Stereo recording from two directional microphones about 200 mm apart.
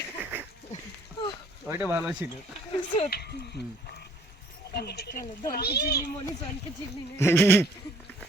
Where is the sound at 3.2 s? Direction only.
55° left (ahead or behind).